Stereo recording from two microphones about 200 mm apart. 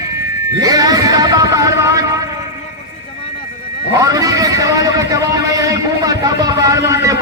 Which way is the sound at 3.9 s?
15° right (ahead or behind).